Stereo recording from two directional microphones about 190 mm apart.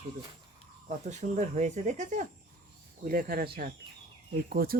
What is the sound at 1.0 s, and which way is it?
Speech, 35° right (ahead or behind).